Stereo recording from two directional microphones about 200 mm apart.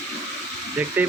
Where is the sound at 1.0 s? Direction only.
10° right (ahead or behind).